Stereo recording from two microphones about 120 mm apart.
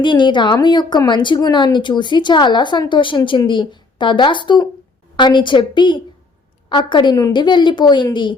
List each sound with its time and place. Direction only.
0.0 s a woman's voice: 40° left (ahead or behind)